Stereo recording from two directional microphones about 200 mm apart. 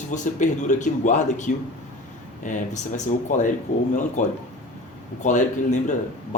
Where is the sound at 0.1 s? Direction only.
40° left (ahead or behind).